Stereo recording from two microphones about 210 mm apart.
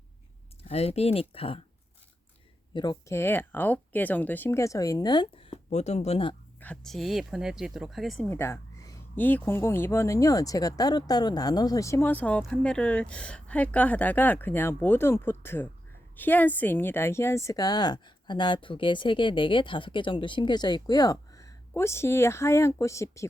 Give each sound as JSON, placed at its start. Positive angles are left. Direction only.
{"t": 0.7, "sound": "speech", "side_deg": 30}
{"t": 2.7, "sound": "speech", "side_deg": 20}
{"t": 6.6, "sound": "speech", "side_deg": 5}